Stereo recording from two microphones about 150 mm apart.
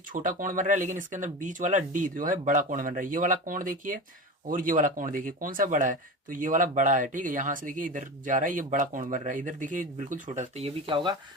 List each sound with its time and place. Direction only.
0.1 s speech: 60° right (ahead or behind)
10.8 s speech: 35° right (ahead or behind)